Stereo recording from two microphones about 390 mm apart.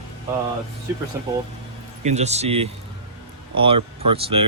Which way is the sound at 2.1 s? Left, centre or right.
Centre.